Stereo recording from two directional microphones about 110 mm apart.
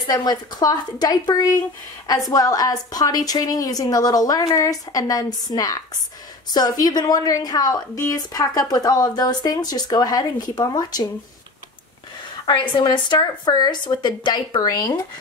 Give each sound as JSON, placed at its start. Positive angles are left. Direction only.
{"t": 0.0, "sound": "a woman's voice", "side_deg": 40}
{"t": 12.4, "sound": "speech", "side_deg": 45}